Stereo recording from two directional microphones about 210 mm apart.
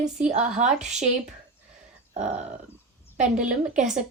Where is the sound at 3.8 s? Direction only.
5° right (ahead or behind).